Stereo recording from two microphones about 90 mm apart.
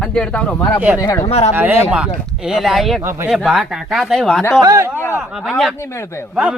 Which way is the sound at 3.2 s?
5° right (ahead or behind).